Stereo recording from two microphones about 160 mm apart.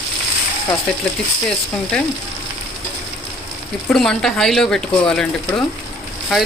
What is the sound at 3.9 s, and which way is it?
Speech, 5° left (ahead or behind).